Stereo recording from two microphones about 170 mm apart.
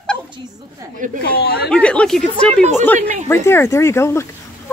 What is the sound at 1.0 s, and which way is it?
Speech, 50° right (ahead or behind).